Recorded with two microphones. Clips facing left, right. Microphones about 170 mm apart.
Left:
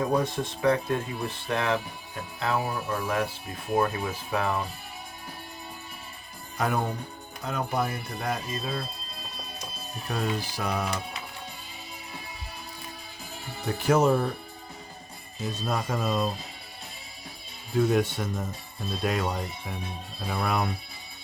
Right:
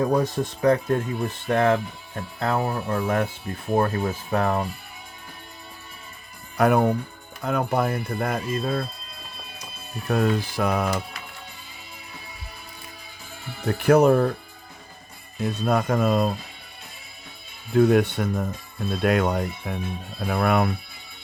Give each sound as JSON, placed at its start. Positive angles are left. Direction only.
{"t": 0.1, "sound": "speech", "side_deg": -40}
{"t": 6.6, "sound": "speech", "side_deg": -60}
{"t": 10.1, "sound": "speech", "side_deg": -55}
{"t": 13.7, "sound": "speech", "side_deg": -60}
{"t": 15.4, "sound": "speech", "side_deg": -60}
{"t": 17.7, "sound": "speech", "side_deg": -60}